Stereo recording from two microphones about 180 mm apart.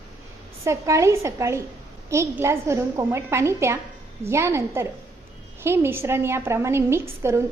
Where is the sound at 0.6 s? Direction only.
15° right (ahead or behind).